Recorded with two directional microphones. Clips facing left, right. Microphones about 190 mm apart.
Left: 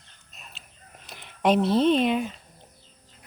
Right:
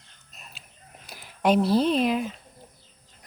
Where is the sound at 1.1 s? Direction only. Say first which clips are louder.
Even; 5° right (ahead or behind).